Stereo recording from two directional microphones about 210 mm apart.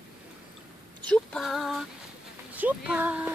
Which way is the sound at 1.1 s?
Centre (ahead or behind).